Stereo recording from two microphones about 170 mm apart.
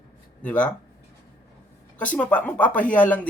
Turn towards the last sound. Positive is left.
turn(degrees=10)  # may be behind; listen again after turning